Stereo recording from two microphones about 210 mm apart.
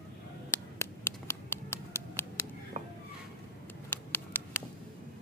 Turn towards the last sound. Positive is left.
turn(degrees=10)  # may be behind; listen again after turning